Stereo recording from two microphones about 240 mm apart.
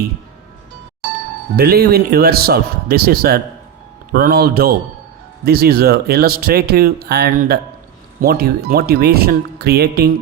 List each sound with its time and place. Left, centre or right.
1.5 s speech: right